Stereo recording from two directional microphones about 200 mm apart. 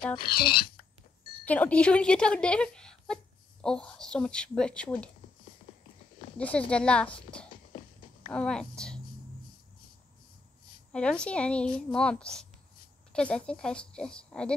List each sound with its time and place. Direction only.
0.4 s speech: 25° left (ahead or behind)
1.4 s speech: 5° left (ahead or behind)
6.3 s a woman's voice: 5° left (ahead or behind)
10.9 s speech: 5° left (ahead or behind)